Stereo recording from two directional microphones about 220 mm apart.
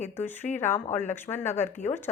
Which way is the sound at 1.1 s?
10° left (ahead or behind).